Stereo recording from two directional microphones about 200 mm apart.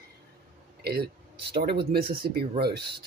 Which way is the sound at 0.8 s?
50° right (ahead or behind).